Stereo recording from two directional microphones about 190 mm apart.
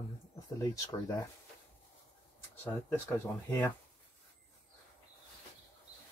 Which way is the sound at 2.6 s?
10° left (ahead or behind).